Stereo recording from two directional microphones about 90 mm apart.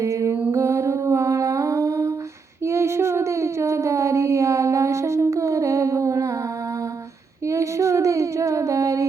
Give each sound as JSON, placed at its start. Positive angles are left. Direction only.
{"t": 0.0, "sound": "music", "side_deg": -35}
{"t": 0.5, "sound": "humming", "side_deg": -35}
{"t": 2.6, "sound": "a sound", "side_deg": -30}
{"t": 7.4, "sound": "female singing", "side_deg": -35}